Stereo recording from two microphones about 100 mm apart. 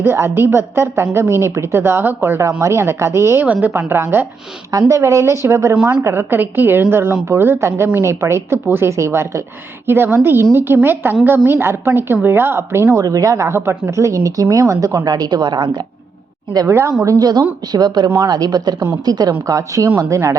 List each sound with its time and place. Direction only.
0.0 s speech: 25° right (ahead or behind)
3.4 s a woman's voice: 15° right (ahead or behind)
3.7 s speech: 25° right (ahead or behind)
5.7 s a woman's voice: 15° right (ahead or behind)
6.0 s speech: 25° right (ahead or behind); by 15.8 s 50° right (ahead or behind)
16.6 s speech: 25° right (ahead or behind)